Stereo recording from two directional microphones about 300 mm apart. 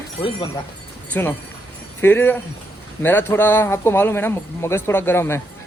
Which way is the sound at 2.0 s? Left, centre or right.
Centre.